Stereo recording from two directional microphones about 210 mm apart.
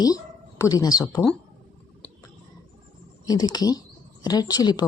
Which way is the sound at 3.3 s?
20° left (ahead or behind).